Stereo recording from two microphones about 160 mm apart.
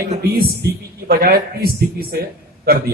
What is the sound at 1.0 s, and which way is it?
A man's voice, 70° right (ahead or behind).